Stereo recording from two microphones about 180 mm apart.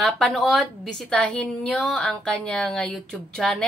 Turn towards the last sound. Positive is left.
turn(degrees=5)  # may be behind; listen again after turning